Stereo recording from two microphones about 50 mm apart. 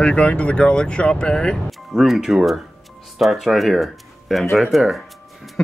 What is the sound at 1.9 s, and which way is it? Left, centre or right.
Speech, centre.